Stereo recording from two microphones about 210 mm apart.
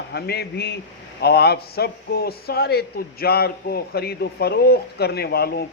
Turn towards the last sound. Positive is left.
turn(degrees=50)  # may be behind; listen again after turning